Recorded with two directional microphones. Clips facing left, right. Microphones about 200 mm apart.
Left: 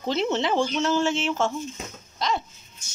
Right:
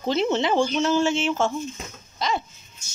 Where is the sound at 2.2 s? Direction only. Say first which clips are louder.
Right 1 dB; centre (ahead or behind).